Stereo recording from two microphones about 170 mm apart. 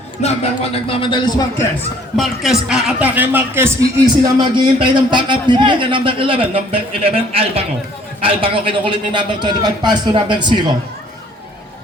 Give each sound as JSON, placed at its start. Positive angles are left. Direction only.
{"t": 0.2, "sound": "speech", "side_deg": 40}
{"t": 2.1, "sound": "speech", "side_deg": 0}
{"t": 4.2, "sound": "a man's voice", "side_deg": -25}